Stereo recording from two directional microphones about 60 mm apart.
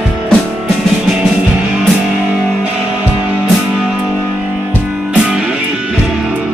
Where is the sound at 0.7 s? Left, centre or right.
Centre.